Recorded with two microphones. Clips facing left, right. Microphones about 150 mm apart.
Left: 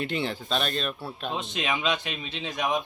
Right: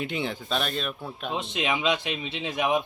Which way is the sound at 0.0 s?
10° right (ahead or behind).